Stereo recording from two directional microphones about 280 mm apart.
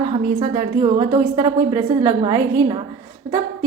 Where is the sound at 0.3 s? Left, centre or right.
Centre.